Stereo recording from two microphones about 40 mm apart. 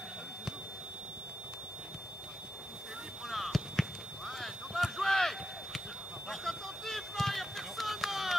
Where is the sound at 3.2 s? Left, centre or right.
Centre.